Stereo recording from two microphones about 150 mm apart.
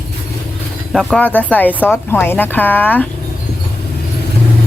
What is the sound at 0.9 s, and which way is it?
Speech, 5° left (ahead or behind).